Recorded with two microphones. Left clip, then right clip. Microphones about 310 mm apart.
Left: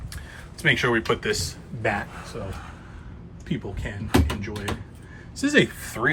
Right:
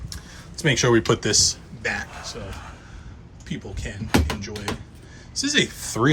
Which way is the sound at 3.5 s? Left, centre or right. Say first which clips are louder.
Left 2 dB; centre.